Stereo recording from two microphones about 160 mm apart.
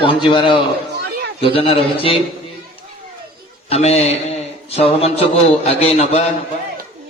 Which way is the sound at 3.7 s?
40° left (ahead or behind).